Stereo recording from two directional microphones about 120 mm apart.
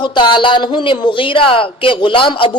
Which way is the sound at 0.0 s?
40° left (ahead or behind).